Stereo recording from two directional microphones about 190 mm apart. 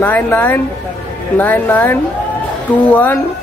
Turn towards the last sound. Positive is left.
turn(degrees=10)  # may be behind; listen again after turning